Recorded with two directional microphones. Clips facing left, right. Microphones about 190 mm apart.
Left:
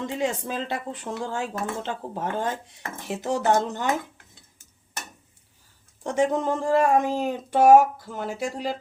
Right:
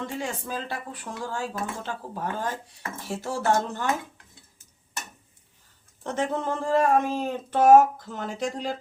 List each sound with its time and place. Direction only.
0.0 s speech: 20° left (ahead or behind)
6.0 s speech: 15° left (ahead or behind)